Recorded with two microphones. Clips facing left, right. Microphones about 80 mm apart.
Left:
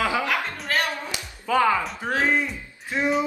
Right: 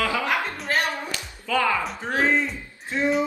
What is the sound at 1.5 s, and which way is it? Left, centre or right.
Speech, left.